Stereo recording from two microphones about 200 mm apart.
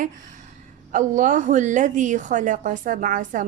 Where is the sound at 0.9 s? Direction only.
40° right (ahead or behind).